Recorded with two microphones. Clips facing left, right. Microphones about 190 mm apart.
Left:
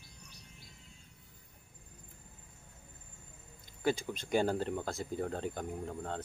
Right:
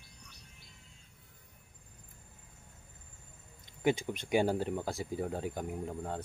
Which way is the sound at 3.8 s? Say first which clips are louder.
Right 2 dB; 20° right (ahead or behind).